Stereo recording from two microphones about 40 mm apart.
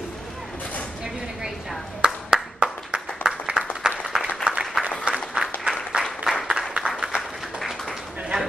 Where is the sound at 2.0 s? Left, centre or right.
Right.